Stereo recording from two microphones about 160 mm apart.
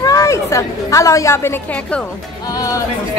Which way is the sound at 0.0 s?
20° left (ahead or behind).